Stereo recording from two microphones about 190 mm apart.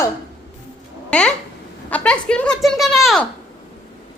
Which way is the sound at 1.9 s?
5° left (ahead or behind).